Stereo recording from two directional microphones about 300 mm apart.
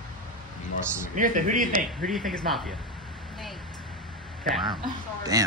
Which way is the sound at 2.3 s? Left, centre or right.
Centre.